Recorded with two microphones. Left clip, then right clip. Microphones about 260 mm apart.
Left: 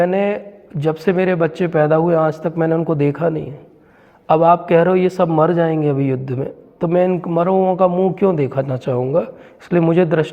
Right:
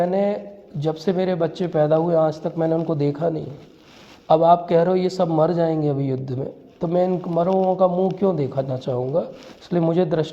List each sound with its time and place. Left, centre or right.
0.0 s a man's voice: left